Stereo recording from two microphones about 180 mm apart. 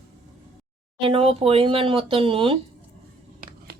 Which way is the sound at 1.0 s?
30° right (ahead or behind).